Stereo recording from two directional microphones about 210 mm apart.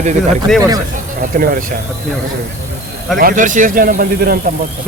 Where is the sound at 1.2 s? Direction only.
40° right (ahead or behind).